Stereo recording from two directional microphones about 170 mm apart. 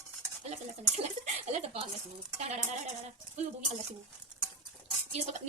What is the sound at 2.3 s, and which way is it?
Speech, 40° right (ahead or behind).